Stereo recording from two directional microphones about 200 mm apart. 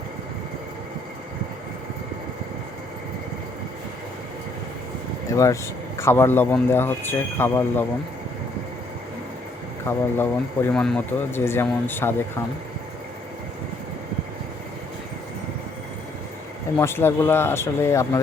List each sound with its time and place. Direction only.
5.3 s speech: 15° left (ahead or behind)
9.8 s speech: 10° left (ahead or behind)
16.7 s speech: 10° left (ahead or behind)